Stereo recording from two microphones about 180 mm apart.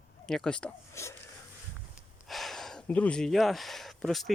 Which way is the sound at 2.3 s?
Centre (ahead or behind).